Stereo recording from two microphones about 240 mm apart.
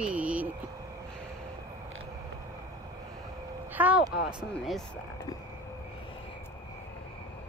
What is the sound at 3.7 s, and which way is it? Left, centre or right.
Speech, centre.